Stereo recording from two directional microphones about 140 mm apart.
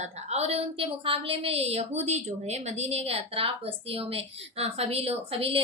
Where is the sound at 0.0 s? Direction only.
50° right (ahead or behind).